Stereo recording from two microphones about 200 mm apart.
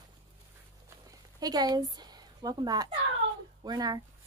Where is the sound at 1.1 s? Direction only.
20° right (ahead or behind).